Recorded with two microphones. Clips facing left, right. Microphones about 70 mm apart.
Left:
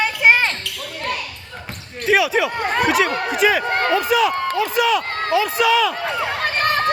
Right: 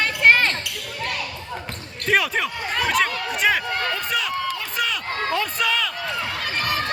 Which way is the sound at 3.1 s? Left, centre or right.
Left.